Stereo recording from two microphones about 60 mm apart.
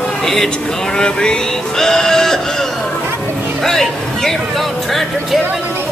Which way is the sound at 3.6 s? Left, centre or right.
Centre.